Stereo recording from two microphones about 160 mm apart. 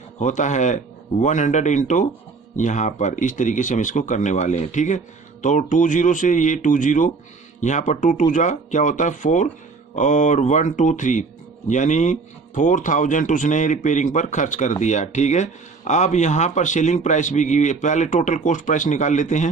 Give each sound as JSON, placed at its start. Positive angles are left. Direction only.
{"t": 0.2, "sound": "speech", "side_deg": 50}